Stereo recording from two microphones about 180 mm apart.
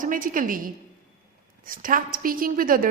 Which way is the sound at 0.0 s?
45° right (ahead or behind).